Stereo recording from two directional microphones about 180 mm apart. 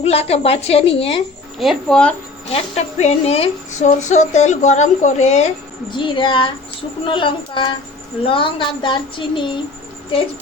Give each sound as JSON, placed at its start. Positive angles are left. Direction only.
{"t": 0.0, "sound": "speech", "side_deg": 35}
{"t": 1.5, "sound": "speech", "side_deg": 0}
{"t": 2.5, "sound": "speech", "side_deg": 40}
{"t": 5.9, "sound": "a child's voice", "side_deg": 25}